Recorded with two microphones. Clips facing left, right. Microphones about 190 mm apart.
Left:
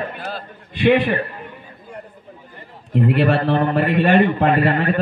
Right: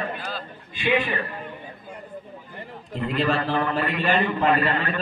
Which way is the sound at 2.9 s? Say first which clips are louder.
Left 7 dB; 65° left (ahead or behind).